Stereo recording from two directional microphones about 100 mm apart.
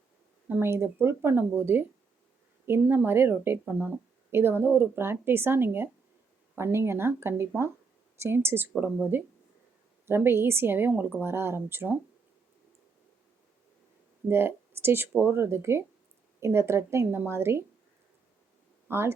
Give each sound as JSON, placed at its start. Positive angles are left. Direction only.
{"t": 0.4, "sound": "a woman's voice", "side_deg": -20}
{"t": 14.3, "sound": "a woman's voice", "side_deg": -25}
{"t": 18.9, "sound": "speech", "side_deg": -25}